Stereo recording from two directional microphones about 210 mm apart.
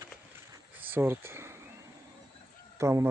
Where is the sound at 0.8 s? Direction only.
10° right (ahead or behind).